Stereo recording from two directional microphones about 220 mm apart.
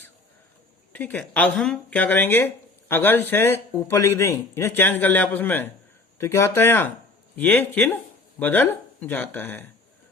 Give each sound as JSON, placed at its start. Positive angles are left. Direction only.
{"t": 0.9, "sound": "a man's voice", "side_deg": 5}